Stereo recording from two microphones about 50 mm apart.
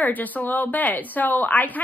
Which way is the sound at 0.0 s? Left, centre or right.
Left.